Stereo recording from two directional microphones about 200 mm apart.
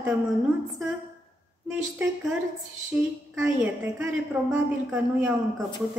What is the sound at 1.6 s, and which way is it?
A woman's voice, 10° right (ahead or behind).